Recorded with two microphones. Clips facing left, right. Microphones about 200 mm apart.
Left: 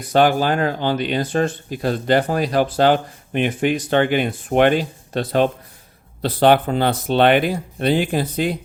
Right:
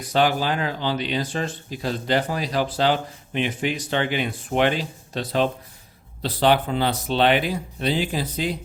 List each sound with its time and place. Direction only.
0.1 s speech: 50° left (ahead or behind)